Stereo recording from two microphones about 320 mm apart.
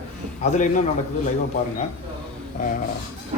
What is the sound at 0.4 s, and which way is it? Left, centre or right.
Speech, left.